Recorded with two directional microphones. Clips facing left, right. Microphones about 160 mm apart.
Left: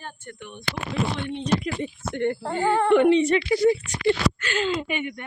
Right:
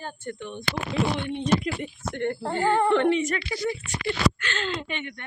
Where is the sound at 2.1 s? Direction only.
15° left (ahead or behind).